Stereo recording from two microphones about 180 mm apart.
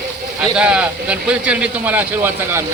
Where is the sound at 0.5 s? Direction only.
5° right (ahead or behind).